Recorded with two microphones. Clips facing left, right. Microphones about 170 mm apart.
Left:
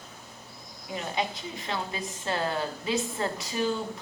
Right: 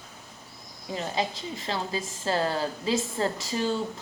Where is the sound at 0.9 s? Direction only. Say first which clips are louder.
Right 2 dB; 30° right (ahead or behind).